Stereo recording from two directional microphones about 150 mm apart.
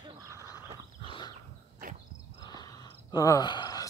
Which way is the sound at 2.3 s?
30° left (ahead or behind).